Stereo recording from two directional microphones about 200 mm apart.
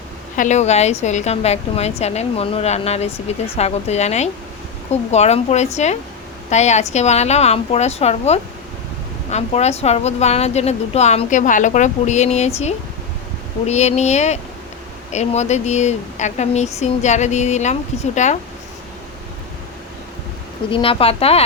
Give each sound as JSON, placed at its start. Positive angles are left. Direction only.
{"t": 0.3, "sound": "a woman's voice", "side_deg": 35}
{"t": 20.7, "sound": "speech", "side_deg": 25}